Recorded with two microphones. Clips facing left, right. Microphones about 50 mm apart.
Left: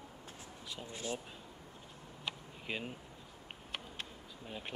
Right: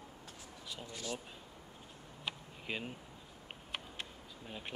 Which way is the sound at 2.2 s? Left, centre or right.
Centre.